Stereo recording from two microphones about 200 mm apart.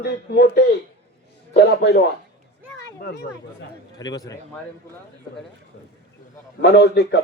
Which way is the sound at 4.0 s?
20° left (ahead or behind).